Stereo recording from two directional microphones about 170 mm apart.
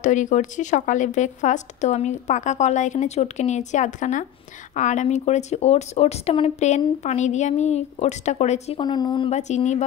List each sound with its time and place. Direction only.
0.0 s a woman's voice: 45° left (ahead or behind)
8.8 s speech: 25° left (ahead or behind)
9.3 s a woman's voice: 40° left (ahead or behind)